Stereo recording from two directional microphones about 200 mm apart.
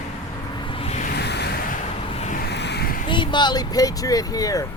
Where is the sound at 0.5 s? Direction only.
25° left (ahead or behind).